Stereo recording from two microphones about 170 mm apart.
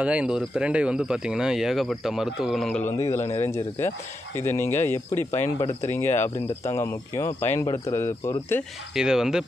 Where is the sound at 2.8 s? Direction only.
15° left (ahead or behind).